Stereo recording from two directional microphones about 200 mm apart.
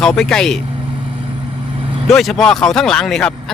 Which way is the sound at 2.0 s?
Centre (ahead or behind).